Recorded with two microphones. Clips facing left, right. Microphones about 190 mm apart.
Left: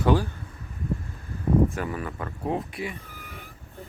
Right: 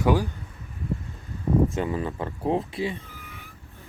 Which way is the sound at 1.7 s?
20° right (ahead or behind).